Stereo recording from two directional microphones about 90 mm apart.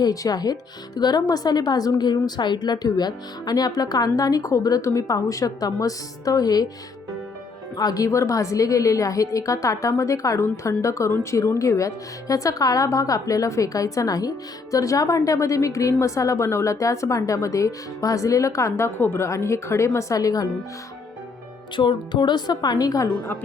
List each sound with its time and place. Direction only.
0.0 s speech: 45° left (ahead or behind)
7.8 s a woman's voice: 45° left (ahead or behind)
18.9 s a woman's voice: 25° left (ahead or behind); by 20.5 s 40° left (ahead or behind)
21.8 s speech: 60° left (ahead or behind); by 23.1 s 45° left (ahead or behind)